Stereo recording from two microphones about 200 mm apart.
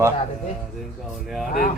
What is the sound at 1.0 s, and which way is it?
Speech, centre (ahead or behind).